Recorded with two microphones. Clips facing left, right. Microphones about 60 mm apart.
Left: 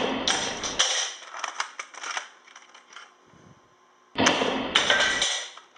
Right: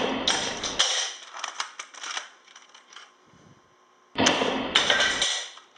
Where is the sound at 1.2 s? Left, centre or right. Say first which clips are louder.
Left 2 dB; left.